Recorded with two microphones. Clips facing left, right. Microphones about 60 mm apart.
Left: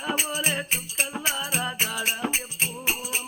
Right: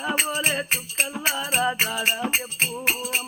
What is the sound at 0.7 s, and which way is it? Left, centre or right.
Music, right.